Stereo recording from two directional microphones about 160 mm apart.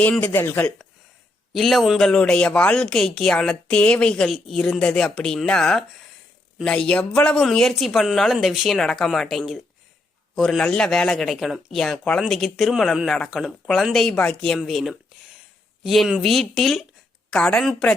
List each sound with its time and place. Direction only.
0.0 s speech: 10° left (ahead or behind)
1.5 s speech: centre (ahead or behind)